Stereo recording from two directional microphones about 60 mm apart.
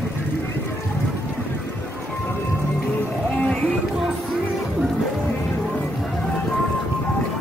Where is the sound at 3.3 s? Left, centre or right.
Centre.